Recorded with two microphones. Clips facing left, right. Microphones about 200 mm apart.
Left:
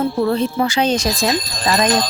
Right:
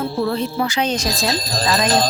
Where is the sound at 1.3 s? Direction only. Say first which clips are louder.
Left 1 dB; 35° right (ahead or behind).